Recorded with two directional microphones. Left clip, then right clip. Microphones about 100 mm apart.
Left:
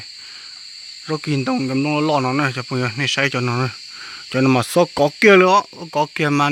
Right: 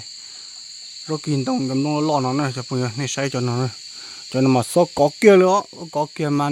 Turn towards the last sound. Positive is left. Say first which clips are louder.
# left 4 dB
turn(degrees=-5)  # may be behind; listen again after turning